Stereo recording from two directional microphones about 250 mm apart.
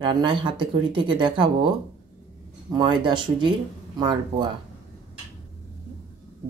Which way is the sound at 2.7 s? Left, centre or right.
Centre.